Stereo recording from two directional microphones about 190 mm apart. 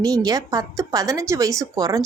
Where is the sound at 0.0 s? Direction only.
20° right (ahead or behind).